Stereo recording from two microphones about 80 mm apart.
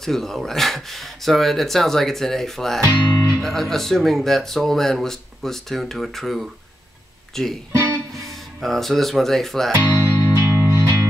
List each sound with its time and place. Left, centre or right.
0.0 s speech: centre
9.8 s music: right